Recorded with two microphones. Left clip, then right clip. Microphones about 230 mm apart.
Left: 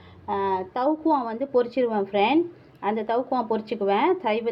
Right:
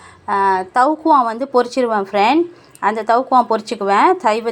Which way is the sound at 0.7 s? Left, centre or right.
Right.